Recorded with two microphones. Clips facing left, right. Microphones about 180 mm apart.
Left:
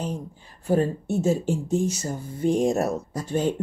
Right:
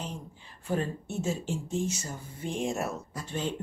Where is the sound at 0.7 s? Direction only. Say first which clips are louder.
Left 9 dB; 40° left (ahead or behind).